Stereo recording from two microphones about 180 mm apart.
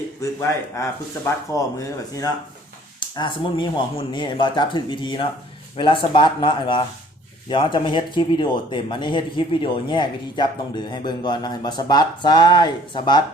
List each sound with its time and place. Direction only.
0.2 s speech: 15° left (ahead or behind)
3.2 s speech: 25° left (ahead or behind)